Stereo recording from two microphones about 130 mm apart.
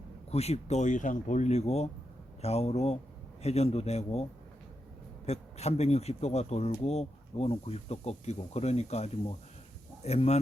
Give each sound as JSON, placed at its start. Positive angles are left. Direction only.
{"t": 0.3, "sound": "speech", "side_deg": 55}